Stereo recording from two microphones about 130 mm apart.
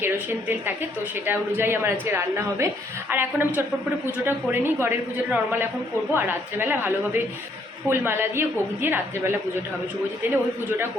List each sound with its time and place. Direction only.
0.0 s a woman's voice: 15° right (ahead or behind)